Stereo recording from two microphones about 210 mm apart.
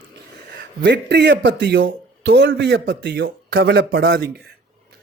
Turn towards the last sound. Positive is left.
turn(degrees=-55)  # may be behind; listen again after turning